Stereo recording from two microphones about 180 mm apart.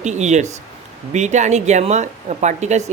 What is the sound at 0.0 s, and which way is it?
Speech, 40° right (ahead or behind).